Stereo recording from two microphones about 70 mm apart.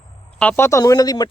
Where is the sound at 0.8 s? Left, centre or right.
Left.